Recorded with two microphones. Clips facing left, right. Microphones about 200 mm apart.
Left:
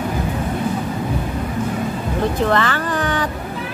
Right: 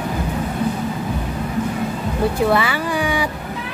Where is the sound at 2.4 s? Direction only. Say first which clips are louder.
Right 1 dB; 10° right (ahead or behind).